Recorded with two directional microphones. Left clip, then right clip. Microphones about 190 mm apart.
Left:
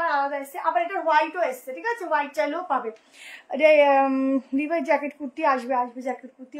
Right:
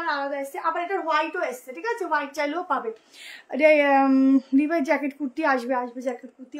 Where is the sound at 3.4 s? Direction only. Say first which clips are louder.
Left 1 dB; 25° right (ahead or behind).